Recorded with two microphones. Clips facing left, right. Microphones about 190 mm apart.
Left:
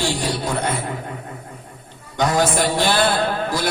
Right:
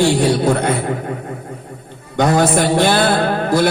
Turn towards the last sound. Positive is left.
turn(degrees=-55)  # may be behind; listen again after turning